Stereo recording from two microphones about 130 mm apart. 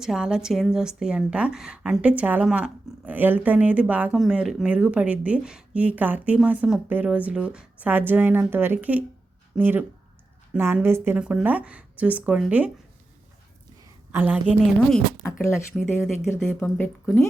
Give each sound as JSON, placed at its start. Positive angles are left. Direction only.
{"t": 0.0, "sound": "a woman's voice", "side_deg": -5}
{"t": 14.1, "sound": "speech", "side_deg": -15}
{"t": 14.8, "sound": "a woman's voice", "side_deg": 5}
{"t": 15.3, "sound": "speech", "side_deg": 20}
{"t": 15.7, "sound": "a woman's voice", "side_deg": 0}
{"t": 16.3, "sound": "speech", "side_deg": 15}